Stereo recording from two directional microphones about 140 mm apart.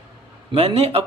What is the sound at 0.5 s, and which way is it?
Mantra, 45° right (ahead or behind).